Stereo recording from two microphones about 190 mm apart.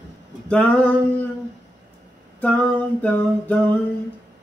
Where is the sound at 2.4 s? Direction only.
5° left (ahead or behind).